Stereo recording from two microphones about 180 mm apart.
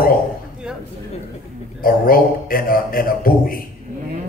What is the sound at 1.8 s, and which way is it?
Speech, 55° left (ahead or behind).